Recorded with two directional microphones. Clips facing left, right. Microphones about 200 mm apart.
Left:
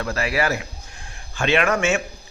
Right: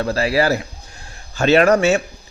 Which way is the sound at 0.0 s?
30° right (ahead or behind).